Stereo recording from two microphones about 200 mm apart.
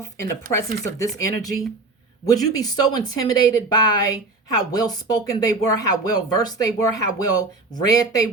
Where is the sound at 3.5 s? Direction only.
20° left (ahead or behind).